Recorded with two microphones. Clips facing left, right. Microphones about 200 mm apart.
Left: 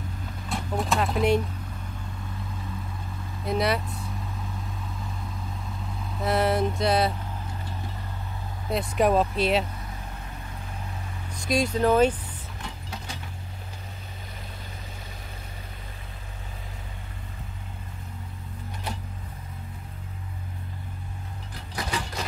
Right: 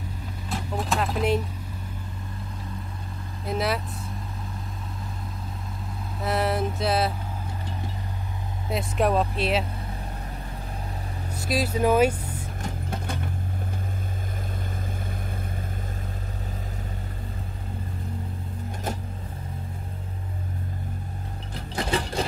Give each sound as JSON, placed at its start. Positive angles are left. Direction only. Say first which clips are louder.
{"t": 0.5, "sound": "a sound", "louder": "left 1 dB", "side_deg": 0}
{"t": 3.4, "sound": "speech", "louder": "left 1 dB", "side_deg": 0}
{"t": 6.2, "sound": "music", "louder": "left 2 dB", "side_deg": 0}
{"t": 8.6, "sound": "speech", "louder": "left 1 dB", "side_deg": 0}
{"t": 11.3, "sound": "speech", "louder": "left 1 dB", "side_deg": -5}
{"t": 12.6, "sound": "mechanisms", "louder": "right 6 dB", "side_deg": -55}
{"t": 21.7, "sound": "sewing machine", "louder": "right 5 dB", "side_deg": -30}